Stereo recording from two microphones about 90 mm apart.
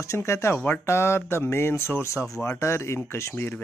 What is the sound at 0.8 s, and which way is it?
Speech, 30° left (ahead or behind).